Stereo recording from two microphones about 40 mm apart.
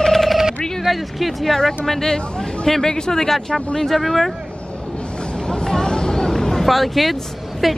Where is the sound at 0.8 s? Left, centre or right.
Centre.